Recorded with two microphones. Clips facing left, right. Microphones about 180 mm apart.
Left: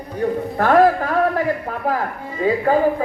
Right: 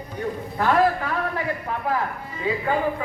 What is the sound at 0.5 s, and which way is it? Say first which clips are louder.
Speech: left 6 dB; 45° left (ahead or behind).